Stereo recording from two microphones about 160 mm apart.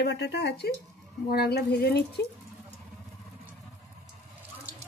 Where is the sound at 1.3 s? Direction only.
80° left.